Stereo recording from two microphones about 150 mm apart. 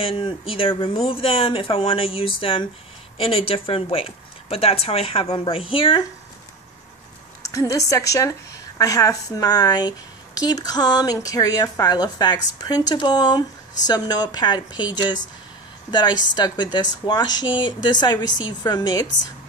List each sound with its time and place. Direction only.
0.0 s speech: 35° left (ahead or behind)
7.5 s speech: 20° left (ahead or behind)
15.9 s speech: 30° left (ahead or behind)